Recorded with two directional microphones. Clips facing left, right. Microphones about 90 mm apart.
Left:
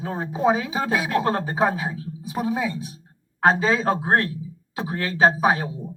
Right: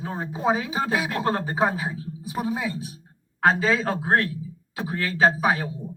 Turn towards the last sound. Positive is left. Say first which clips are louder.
# left 2 dB
turn(degrees=25)  # may be behind; listen again after turning